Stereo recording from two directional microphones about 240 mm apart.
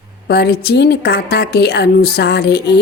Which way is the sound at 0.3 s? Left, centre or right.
Left.